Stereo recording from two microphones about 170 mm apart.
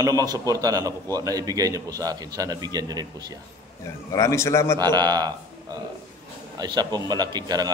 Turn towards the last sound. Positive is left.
turn(degrees=-25)  # may be behind; listen again after turning